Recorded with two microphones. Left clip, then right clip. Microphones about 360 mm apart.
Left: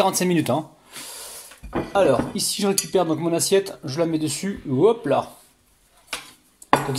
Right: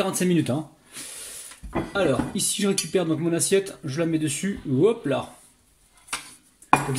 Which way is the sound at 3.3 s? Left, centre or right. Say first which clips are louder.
Left 3 dB; centre.